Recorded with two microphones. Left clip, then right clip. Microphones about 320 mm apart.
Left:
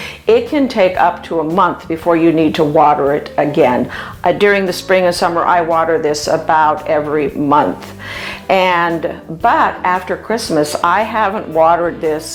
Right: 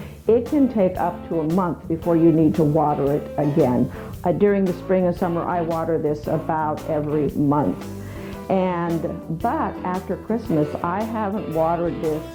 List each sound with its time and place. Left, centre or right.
0.3 s speech: centre